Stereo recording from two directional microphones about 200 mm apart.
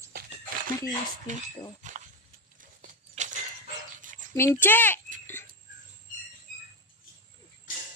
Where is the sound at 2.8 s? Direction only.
40° right (ahead or behind).